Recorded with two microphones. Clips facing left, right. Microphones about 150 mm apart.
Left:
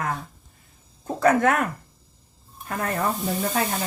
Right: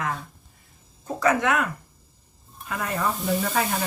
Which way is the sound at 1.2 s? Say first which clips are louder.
Left 3 dB; 55° left (ahead or behind).